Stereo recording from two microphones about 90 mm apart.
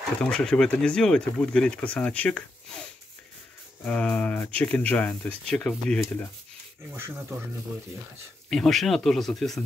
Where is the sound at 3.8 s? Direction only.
15° left (ahead or behind).